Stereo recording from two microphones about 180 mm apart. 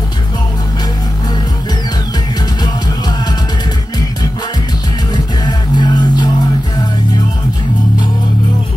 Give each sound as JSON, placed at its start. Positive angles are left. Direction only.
{"t": 5.1, "sound": "music", "side_deg": 25}